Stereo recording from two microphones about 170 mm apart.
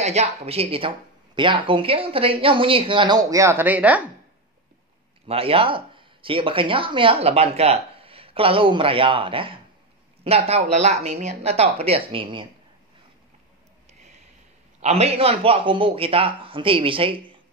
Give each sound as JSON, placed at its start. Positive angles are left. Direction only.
{"t": 0.0, "sound": "speech", "side_deg": -40}
{"t": 5.2, "sound": "speech", "side_deg": -35}
{"t": 14.8, "sound": "speech", "side_deg": -40}